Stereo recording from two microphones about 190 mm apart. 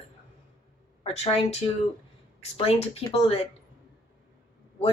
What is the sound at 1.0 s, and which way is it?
A woman's voice, 30° left (ahead or behind).